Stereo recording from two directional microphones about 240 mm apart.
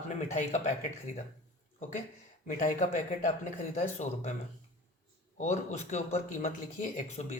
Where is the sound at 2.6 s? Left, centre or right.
Left.